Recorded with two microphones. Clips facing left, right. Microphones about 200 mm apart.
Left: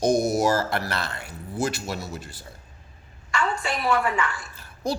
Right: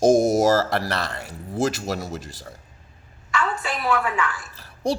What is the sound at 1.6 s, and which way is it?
Speech, 90° right.